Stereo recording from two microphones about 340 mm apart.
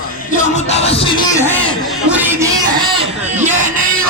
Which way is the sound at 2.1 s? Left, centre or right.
Centre.